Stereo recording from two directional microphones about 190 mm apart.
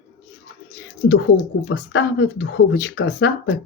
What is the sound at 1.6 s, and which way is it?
Speech, 80° left.